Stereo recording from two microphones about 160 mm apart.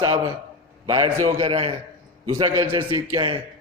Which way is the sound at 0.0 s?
25° right (ahead or behind).